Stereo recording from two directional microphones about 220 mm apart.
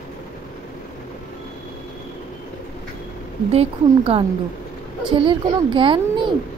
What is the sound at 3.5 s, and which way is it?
Speech, 25° right (ahead or behind).